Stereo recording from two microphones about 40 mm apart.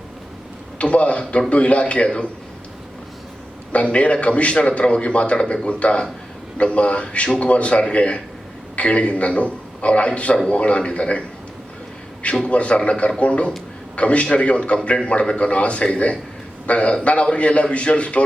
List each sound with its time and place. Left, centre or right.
0.8 s a man's voice: left
3.7 s a man's voice: left
12.5 s a man's voice: left